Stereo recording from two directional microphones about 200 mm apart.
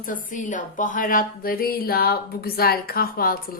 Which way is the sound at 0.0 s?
40° left (ahead or behind).